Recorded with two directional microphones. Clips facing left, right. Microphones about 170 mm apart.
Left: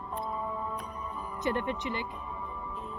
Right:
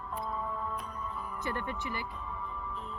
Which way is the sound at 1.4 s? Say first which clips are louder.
Left 6 dB; 20° left (ahead or behind).